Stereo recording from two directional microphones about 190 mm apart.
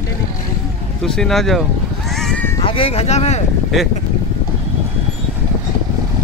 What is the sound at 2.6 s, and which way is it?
Speech, 30° left (ahead or behind).